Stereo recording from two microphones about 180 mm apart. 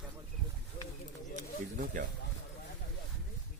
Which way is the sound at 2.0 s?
45° right (ahead or behind).